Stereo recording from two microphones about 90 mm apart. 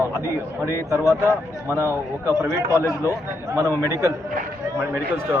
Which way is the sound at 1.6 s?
30° right (ahead or behind).